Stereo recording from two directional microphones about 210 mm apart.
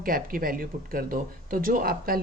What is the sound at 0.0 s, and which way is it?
Speech, 40° right (ahead or behind).